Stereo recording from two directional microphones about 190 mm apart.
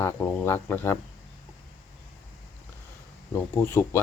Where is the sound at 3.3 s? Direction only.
10° left (ahead or behind).